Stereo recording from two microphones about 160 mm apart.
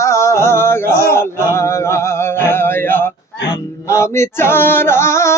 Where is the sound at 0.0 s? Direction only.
15° left (ahead or behind).